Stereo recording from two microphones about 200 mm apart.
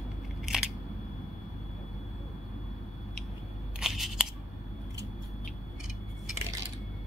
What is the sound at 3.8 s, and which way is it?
Scissors, centre (ahead or behind).